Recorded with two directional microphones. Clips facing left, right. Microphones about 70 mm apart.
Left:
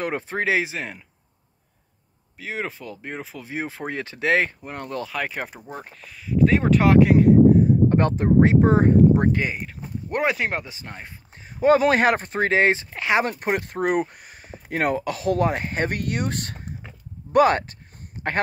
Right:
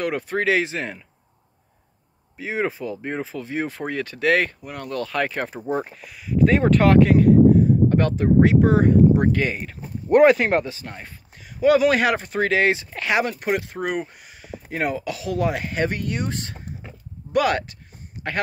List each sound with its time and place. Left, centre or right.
0.0 s speech: left
0.7 s speech: centre
2.3 s speech: centre
3.3 s speech: centre
5.0 s speech: centre
5.7 s speech: centre
7.9 s speech: left
9.2 s speech: centre
9.5 s speech: centre
10.7 s speech: left
13.2 s speech: left
16.0 s speech: left
17.3 s speech: left